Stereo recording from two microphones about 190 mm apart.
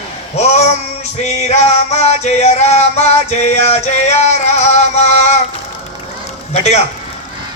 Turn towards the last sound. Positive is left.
turn(degrees=35)  # may be behind; listen again after turning